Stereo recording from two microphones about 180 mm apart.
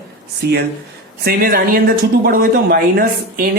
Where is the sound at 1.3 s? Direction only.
55° right (ahead or behind).